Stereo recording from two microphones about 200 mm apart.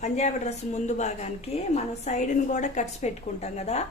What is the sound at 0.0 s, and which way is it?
A woman's voice, 35° left (ahead or behind).